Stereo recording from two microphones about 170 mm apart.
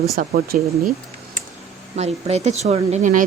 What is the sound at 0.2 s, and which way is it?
Speech, 60° right (ahead or behind).